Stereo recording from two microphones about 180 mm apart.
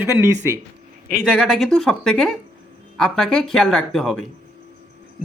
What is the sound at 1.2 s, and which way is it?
Speech, centre (ahead or behind).